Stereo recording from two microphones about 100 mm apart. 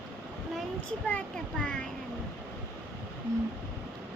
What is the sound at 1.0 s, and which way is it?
Speech, 10° left (ahead or behind).